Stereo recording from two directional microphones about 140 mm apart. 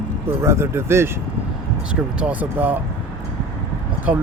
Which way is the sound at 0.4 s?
20° right (ahead or behind).